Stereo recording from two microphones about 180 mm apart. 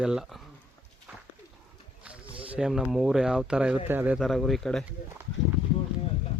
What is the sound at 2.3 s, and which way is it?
Speech, 5° right (ahead or behind).